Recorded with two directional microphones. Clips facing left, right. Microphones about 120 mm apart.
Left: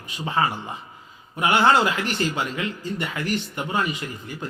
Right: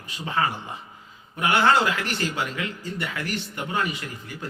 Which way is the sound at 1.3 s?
20° left (ahead or behind).